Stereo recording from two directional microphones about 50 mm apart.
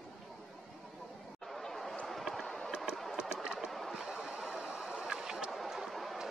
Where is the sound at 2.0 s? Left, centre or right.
Centre.